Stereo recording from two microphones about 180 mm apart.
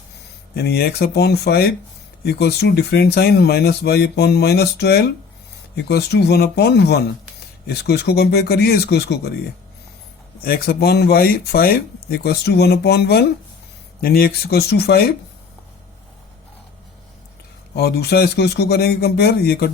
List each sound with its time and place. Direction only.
0.5 s speech: 60° left (ahead or behind)
10.4 s speech: 55° left (ahead or behind)
17.7 s speech: 65° left (ahead or behind)